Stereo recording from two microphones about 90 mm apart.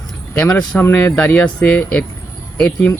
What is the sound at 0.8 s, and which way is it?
Speech, 20° left (ahead or behind).